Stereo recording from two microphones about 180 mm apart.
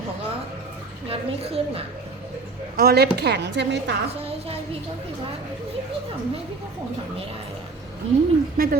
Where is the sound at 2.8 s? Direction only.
60° right (ahead or behind); by 4.0 s 80° right.